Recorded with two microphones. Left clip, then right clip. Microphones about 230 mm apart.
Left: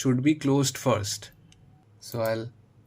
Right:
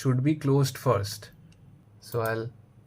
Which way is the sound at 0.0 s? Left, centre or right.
Left.